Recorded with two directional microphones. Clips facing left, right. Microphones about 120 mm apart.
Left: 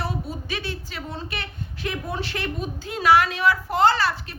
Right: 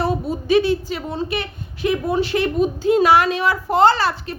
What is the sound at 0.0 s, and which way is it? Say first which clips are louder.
A woman's voice: right 8 dB; 20° right (ahead or behind).